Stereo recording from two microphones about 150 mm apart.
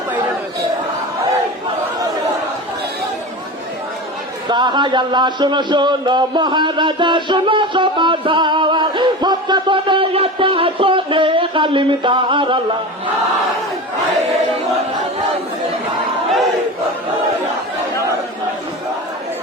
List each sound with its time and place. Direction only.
4.4 s a man's voice: 30° right (ahead or behind)